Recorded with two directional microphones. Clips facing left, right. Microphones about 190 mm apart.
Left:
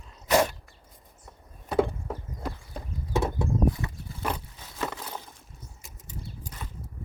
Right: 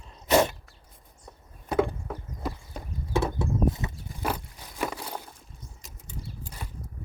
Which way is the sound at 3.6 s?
25° right (ahead or behind).